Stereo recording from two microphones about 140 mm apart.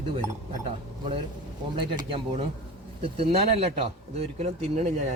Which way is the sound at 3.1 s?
45° right (ahead or behind).